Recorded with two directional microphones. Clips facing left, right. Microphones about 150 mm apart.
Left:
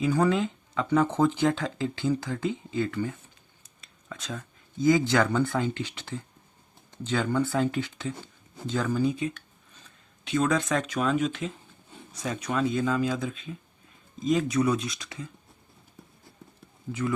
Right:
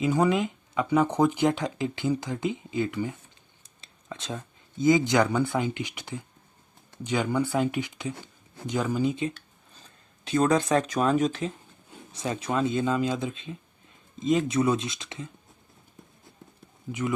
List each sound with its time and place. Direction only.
0.0 s speech: 20° right (ahead or behind)
3.6 s speech: 30° right (ahead or behind)
10.2 s speech: 35° right (ahead or behind)